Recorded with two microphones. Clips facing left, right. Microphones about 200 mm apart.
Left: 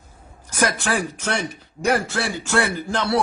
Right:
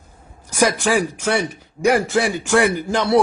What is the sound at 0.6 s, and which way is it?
A man's voice, 10° right (ahead or behind).